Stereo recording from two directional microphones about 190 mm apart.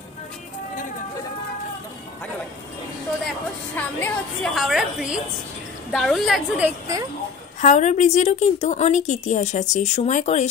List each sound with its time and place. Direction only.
3.7 s a woman's voice: 5° left (ahead or behind)
7.6 s a woman's voice: 40° left (ahead or behind)